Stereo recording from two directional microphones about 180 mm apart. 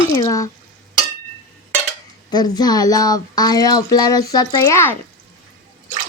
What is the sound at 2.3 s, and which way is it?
Speech, 20° left (ahead or behind).